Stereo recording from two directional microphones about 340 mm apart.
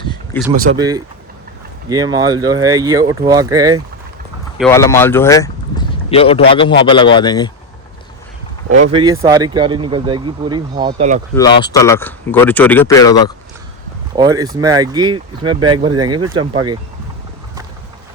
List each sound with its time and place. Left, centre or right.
0.5 s speech: right
0.8 s speech: centre
4.5 s speech: centre
8.8 s speech: centre
11.3 s speech: centre
14.2 s speech: centre